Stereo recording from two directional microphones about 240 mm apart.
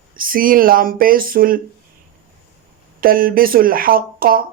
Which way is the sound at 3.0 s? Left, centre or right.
Right.